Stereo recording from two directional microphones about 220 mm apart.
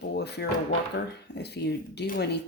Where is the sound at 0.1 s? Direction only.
50° left (ahead or behind).